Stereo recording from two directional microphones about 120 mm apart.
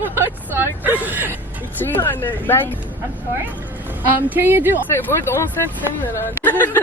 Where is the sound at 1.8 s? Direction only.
15° left (ahead or behind).